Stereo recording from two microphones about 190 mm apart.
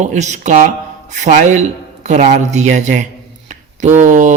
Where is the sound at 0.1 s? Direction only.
40° right (ahead or behind).